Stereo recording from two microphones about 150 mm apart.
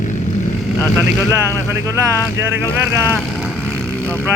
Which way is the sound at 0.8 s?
20° left (ahead or behind).